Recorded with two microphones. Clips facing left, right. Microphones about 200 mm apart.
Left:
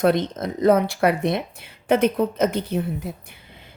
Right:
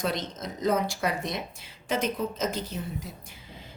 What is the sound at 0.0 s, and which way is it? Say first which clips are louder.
A woman's voice: left 11 dB; 60° left (ahead or behind).